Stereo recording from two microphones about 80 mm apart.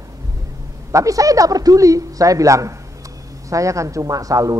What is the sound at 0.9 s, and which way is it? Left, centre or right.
A man's voice, right.